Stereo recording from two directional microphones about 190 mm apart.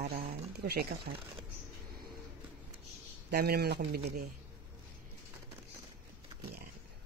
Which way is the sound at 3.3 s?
55° right (ahead or behind).